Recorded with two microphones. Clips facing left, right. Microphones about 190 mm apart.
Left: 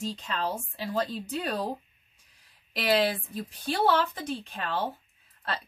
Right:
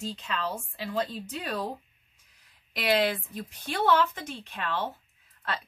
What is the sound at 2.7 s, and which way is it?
A woman's voice, 30° left (ahead or behind).